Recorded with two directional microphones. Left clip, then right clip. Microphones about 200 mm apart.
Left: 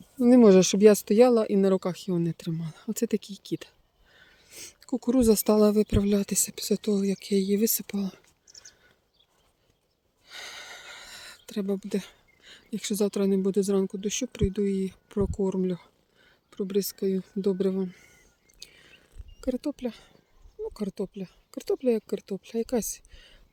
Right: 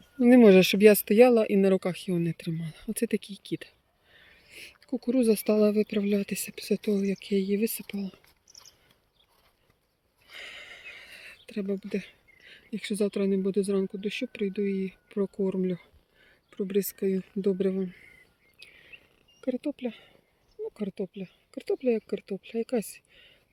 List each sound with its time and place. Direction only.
0.2 s speech: 5° left (ahead or behind); by 8.1 s 25° left (ahead or behind)
10.2 s speech: 15° left (ahead or behind)
18.6 s a sound: 15° left (ahead or behind)
19.4 s speech: 10° left (ahead or behind)
22.8 s speech: 65° left (ahead or behind)
23.1 s whispering: 15° left (ahead or behind)